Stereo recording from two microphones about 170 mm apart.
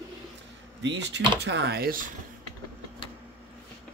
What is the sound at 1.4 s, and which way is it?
Speech, 80° right.